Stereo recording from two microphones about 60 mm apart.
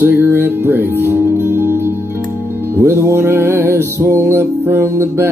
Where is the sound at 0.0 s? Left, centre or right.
Right.